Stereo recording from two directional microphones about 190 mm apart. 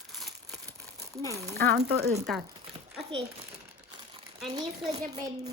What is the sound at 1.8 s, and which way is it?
Speech, 55° right (ahead or behind).